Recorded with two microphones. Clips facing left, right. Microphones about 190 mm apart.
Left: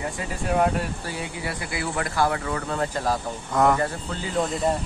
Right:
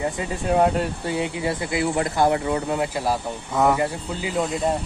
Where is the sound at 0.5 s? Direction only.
25° right (ahead or behind); by 4.3 s 10° right (ahead or behind).